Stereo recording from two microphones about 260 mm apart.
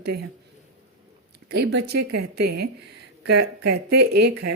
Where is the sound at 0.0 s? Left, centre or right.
Right.